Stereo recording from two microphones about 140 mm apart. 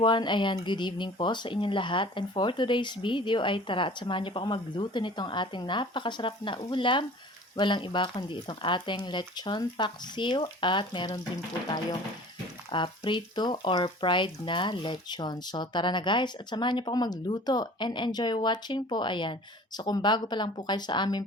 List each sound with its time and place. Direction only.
0.0 s speech: 35° left (ahead or behind)
12.7 s speech: 35° left (ahead or behind)